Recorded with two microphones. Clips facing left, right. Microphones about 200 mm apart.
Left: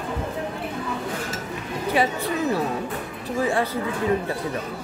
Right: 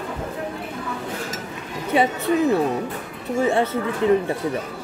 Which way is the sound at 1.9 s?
25° right (ahead or behind).